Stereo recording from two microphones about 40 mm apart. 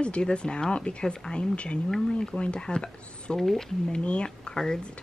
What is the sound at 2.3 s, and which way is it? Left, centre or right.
Speech, left.